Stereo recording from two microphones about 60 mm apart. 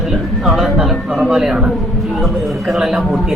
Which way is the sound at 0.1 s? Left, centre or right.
Centre.